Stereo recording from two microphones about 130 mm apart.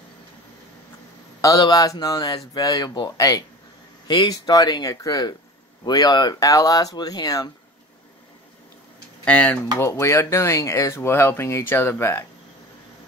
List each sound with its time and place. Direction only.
1.4 s speech: 30° left (ahead or behind)
9.2 s speech: 10° left (ahead or behind)